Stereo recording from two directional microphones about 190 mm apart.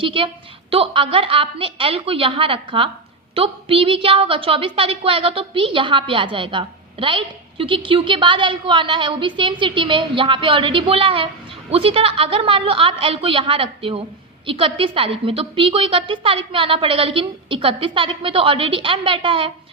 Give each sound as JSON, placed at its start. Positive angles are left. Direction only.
{"t": 0.0, "sound": "a woman's voice", "side_deg": -25}